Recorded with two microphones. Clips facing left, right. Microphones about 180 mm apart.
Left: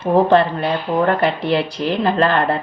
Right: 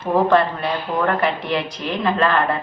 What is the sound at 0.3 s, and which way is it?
Speech, 30° left (ahead or behind).